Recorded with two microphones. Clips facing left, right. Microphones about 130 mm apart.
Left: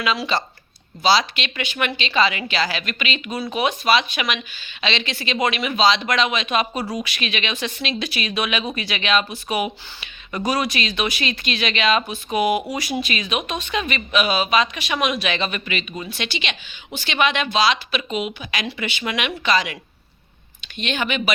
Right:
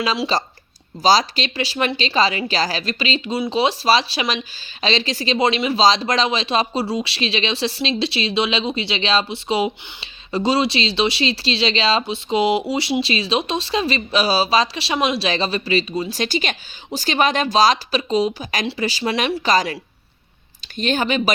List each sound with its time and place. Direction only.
0.0 s speech: 35° right (ahead or behind)